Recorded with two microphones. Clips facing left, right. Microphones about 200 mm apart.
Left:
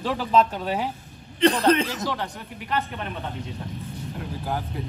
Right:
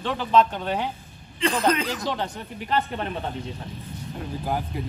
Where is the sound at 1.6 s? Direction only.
30° left (ahead or behind).